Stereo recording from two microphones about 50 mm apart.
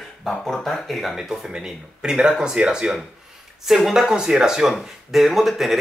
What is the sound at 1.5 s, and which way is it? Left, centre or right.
Speech, centre.